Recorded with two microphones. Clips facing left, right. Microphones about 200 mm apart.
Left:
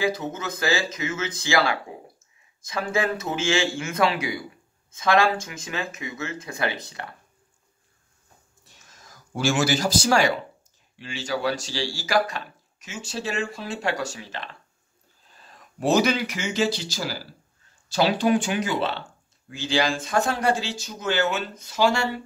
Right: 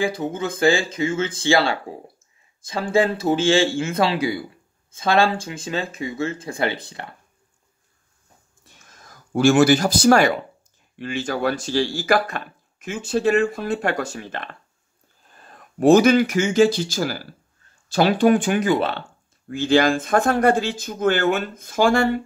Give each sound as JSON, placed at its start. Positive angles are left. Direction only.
{"t": 0.0, "sound": "speech", "side_deg": -30}
{"t": 8.6, "sound": "a sound", "side_deg": -55}
{"t": 11.0, "sound": "speech", "side_deg": -55}